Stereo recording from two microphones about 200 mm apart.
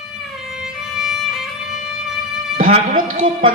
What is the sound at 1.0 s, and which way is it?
Music, centre (ahead or behind).